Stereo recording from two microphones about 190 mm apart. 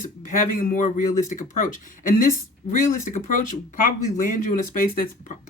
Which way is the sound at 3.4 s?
45° left (ahead or behind).